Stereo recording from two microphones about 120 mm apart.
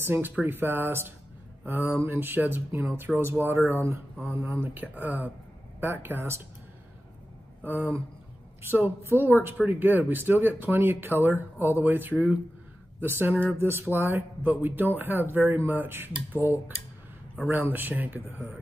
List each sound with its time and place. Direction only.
0.0 s speech: 15° right (ahead or behind)
7.6 s speech: 15° right (ahead or behind)